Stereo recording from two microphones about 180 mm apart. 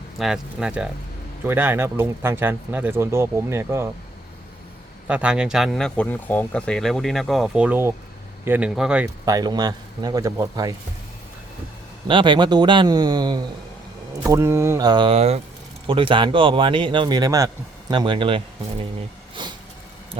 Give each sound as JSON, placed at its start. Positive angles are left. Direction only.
{"t": 0.2, "sound": "speech", "side_deg": -5}
{"t": 5.0, "sound": "speech", "side_deg": -5}
{"t": 9.0, "sound": "speech", "side_deg": -20}
{"t": 12.0, "sound": "speech", "side_deg": -25}
{"t": 19.4, "sound": "vehicle", "side_deg": -25}